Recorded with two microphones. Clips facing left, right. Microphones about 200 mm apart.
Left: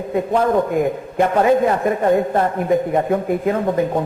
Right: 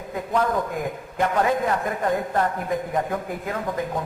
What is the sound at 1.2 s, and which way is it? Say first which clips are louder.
A man's voice: left 7 dB; 25° left (ahead or behind).